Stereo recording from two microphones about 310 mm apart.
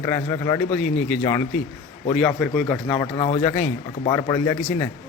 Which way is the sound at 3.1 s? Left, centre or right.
Centre.